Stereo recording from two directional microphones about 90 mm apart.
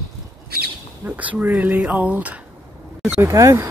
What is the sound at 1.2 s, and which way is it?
Speech, 20° right (ahead or behind).